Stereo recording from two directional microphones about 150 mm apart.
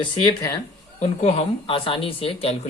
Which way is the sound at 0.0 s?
30° left (ahead or behind).